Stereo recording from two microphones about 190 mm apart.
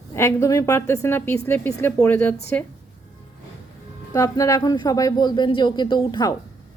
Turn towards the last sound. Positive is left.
turn(degrees=25)  # may be behind; listen again after turning